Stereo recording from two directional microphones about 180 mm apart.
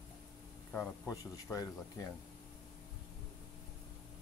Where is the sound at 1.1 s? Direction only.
20° left (ahead or behind).